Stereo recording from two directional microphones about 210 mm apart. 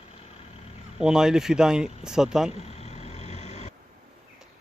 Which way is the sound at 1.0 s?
5° right (ahead or behind).